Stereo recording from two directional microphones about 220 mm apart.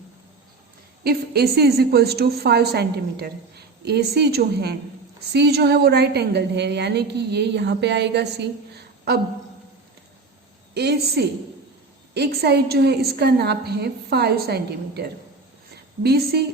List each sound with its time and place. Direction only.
1.0 s a woman's voice: 45° right (ahead or behind)
10.8 s a woman's voice: 50° right (ahead or behind)